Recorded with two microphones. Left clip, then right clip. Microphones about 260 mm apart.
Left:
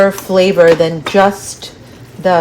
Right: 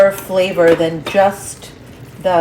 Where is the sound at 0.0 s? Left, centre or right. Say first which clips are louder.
Left 2 dB; left.